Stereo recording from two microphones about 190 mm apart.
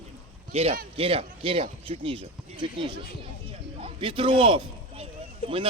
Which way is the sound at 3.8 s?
30° right (ahead or behind).